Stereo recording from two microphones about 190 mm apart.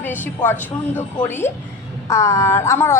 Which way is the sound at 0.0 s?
10° left (ahead or behind).